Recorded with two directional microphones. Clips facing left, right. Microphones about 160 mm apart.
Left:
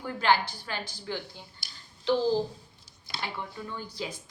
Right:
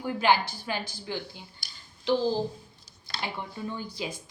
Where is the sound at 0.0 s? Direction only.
15° right (ahead or behind).